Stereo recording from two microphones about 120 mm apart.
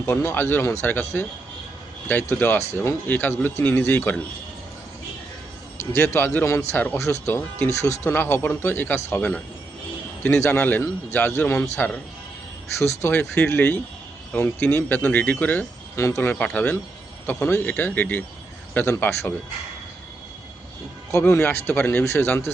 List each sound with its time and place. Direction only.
0.0 s speech: 20° left (ahead or behind)
2.3 s speech: 15° left (ahead or behind)
6.1 s a man's voice: 20° left (ahead or behind)
10.4 s a man's voice: 15° left (ahead or behind)
16.3 s speech: 10° left (ahead or behind)
21.1 s a man's voice: 25° left (ahead or behind)